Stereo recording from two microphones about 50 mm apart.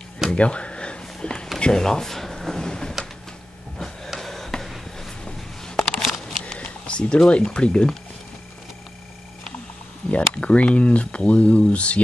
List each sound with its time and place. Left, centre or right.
0.3 s a sound: left
1.6 s speech: centre
3.7 s printer: centre
4.2 s a sound: centre
6.5 s speech: centre
10.1 s speech: left